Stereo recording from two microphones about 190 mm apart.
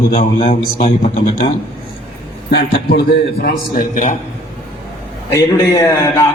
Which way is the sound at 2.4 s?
55° left (ahead or behind).